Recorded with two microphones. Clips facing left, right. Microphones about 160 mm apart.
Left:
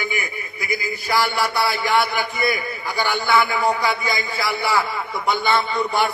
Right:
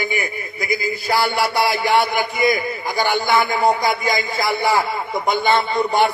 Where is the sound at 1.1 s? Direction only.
35° right (ahead or behind).